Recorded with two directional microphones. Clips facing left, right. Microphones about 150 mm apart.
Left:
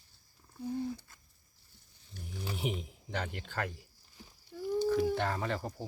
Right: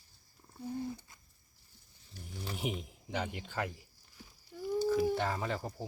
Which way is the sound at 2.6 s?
5° right (ahead or behind).